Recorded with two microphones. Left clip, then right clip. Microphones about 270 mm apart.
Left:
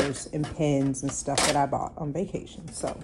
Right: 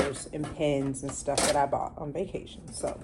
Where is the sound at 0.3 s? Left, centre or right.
Left.